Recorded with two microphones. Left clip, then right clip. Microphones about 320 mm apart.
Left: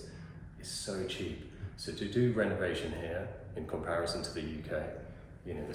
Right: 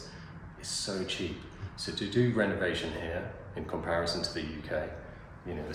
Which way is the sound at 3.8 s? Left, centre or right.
Right.